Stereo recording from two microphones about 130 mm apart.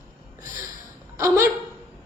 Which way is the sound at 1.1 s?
20° right (ahead or behind).